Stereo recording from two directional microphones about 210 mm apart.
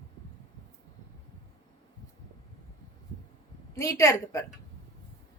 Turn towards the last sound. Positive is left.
turn(degrees=15)  # may be behind; listen again after turning